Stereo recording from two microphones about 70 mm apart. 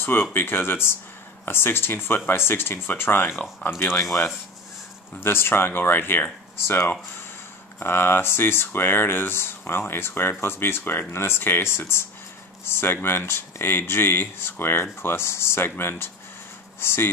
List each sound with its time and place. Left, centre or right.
0.0 s speech: left
5.2 s speech: left